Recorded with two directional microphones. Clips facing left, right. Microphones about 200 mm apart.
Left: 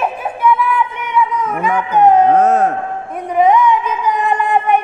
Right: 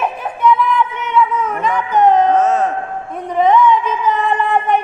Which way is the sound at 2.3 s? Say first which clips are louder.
Left 2 dB; 55° left (ahead or behind).